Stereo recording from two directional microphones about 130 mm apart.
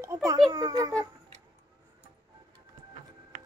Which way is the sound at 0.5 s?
30° right (ahead or behind).